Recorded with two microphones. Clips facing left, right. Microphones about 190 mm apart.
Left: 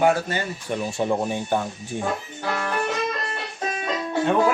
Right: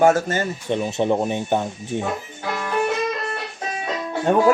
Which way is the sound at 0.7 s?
20° right (ahead or behind).